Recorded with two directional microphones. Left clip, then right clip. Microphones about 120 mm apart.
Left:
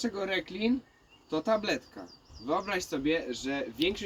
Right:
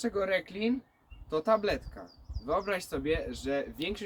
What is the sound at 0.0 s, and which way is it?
Speech, 30° right (ahead or behind).